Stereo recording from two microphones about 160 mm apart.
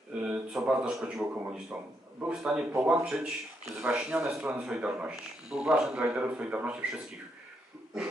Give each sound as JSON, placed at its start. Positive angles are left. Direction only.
{"t": 0.2, "sound": "a man's voice", "side_deg": -5}